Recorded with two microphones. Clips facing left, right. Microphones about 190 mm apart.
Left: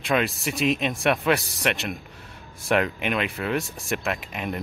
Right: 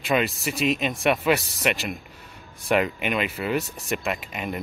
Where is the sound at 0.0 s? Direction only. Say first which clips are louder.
Even; centre (ahead or behind).